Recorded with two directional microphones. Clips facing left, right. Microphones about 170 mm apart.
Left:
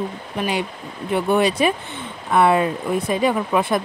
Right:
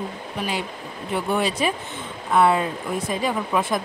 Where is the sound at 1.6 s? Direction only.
65° left (ahead or behind).